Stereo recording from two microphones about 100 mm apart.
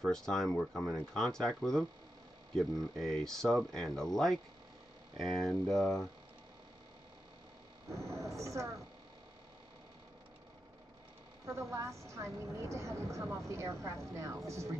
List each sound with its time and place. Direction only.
0.0 s speech: 5° left (ahead or behind)
7.9 s a woman's voice: 30° right (ahead or behind)
11.7 s a woman's voice: 30° right (ahead or behind)